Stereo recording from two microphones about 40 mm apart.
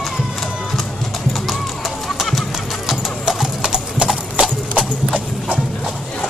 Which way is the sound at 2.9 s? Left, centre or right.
Centre.